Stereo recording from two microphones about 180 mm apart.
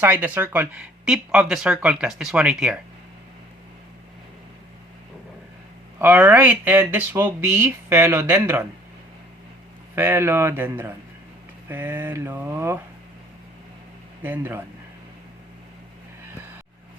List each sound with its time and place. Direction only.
0.0 s speech: 10° right (ahead or behind)
6.0 s speech: 10° right (ahead or behind)
9.9 s speech: 10° right (ahead or behind)
14.2 s speech: 10° right (ahead or behind)